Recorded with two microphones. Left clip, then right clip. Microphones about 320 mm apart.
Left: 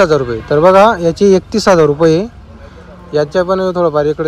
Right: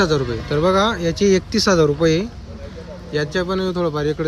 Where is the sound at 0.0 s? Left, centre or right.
Centre.